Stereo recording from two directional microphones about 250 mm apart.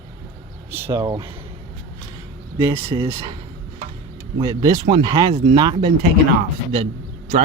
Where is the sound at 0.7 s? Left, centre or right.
Centre.